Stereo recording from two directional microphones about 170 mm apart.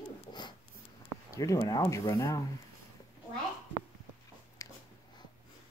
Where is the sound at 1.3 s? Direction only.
20° left (ahead or behind).